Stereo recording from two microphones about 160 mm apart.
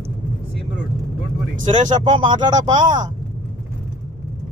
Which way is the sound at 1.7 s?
40° right (ahead or behind).